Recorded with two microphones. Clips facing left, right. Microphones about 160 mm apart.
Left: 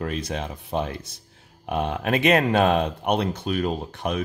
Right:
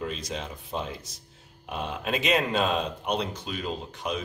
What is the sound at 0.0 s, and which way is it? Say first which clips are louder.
Speech: left 5 dB; 60° left (ahead or behind).